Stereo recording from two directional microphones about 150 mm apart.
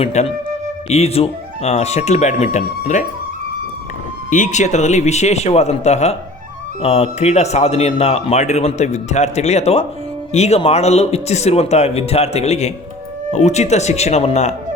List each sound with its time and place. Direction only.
0.0 s speech: 45° left (ahead or behind)
4.3 s speech: 55° left (ahead or behind)